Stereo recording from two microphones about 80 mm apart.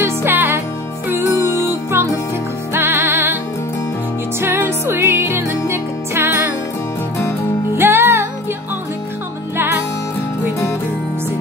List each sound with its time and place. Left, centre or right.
0.0 s music: right
4.4 s music: right
7.7 s music: right
9.6 s music: right